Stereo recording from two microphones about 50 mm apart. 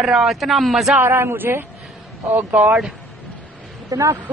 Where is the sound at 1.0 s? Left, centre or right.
Right.